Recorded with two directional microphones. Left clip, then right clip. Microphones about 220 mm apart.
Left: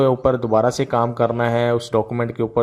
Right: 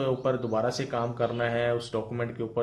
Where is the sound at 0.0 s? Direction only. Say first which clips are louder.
Left 10 dB; 40° left (ahead or behind).